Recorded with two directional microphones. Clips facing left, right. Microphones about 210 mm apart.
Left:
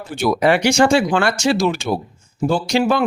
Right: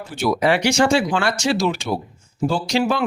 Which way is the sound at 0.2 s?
50° left (ahead or behind).